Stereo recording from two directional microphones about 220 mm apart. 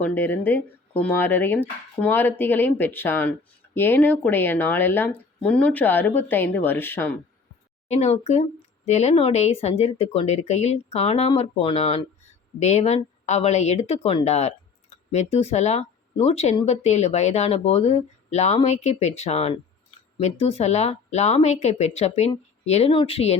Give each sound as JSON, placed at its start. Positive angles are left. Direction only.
{"t": 0.0, "sound": "speech", "side_deg": 10}
{"t": 7.9, "sound": "speech", "side_deg": 30}